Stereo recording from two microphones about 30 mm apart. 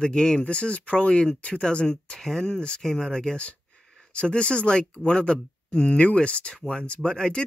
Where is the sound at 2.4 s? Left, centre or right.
Left.